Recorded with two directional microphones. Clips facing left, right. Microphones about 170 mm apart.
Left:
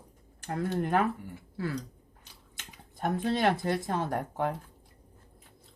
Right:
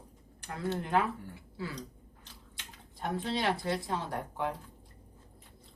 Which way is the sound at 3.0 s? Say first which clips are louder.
Left 5 dB; 50° left (ahead or behind).